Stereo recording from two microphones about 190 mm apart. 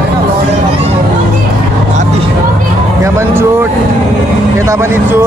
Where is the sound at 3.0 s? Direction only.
15° right (ahead or behind).